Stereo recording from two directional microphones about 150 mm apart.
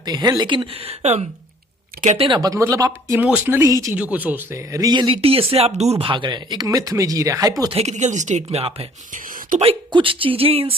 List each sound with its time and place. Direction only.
0.0 s speech: 25° right (ahead or behind)
2.4 s speech: 20° right (ahead or behind)
3.2 s speech: 10° right (ahead or behind)
3.9 s speech: 10° right (ahead or behind)
7.7 s speech: 45° right (ahead or behind)
9.1 s a sound: 60° right (ahead or behind)
9.6 s speech: 40° right (ahead or behind)